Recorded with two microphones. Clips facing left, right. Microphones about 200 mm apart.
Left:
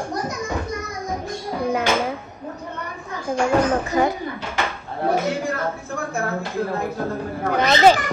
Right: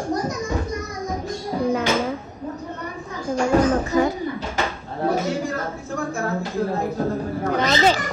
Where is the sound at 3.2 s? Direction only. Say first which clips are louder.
Right 1 dB; 40° right (ahead or behind).